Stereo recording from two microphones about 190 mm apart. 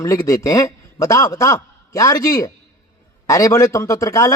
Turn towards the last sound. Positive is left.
turn(degrees=15)  # may be behind; listen again after turning